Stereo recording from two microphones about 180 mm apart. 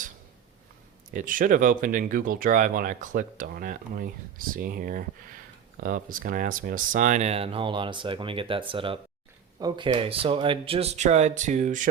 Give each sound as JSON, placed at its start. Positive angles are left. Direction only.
{"t": 1.1, "sound": "speech", "side_deg": -50}